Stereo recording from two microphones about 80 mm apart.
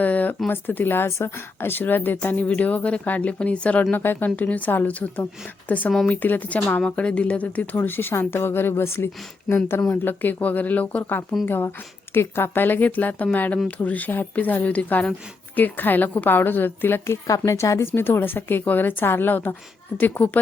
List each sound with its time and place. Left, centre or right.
0.0 s a sound: centre
0.4 s speech: left
17.2 s speech: left